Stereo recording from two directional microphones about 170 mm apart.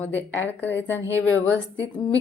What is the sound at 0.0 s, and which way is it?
Speech, 10° left (ahead or behind).